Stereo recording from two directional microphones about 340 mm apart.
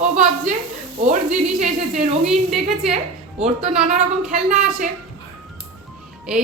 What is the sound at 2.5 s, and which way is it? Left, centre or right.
Speech, centre.